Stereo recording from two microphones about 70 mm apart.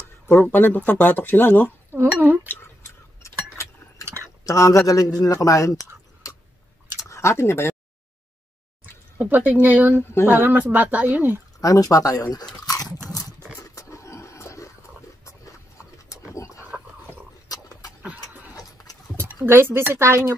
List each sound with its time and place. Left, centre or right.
0.0 s speech: left
4.0 s a sound: right
4.5 s speech: left
9.2 s speech: right
11.6 s speech: left
12.6 s chewing: left
13.6 s vehicle: left
16.1 s wild animals: left
17.5 s dog: left
18.0 s a sound: right
18.5 s a sound: left
19.4 s speech: right